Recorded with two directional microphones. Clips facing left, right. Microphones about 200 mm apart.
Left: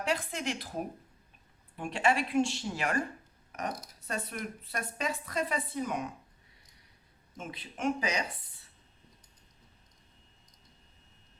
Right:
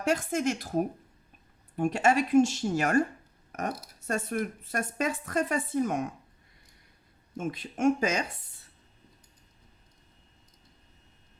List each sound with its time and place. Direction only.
0.0 s a woman's voice: 45° right (ahead or behind)
7.3 s a woman's voice: 45° right (ahead or behind)